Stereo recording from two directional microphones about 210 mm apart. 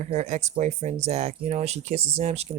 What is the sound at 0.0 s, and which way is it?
Speech, 35° right (ahead or behind).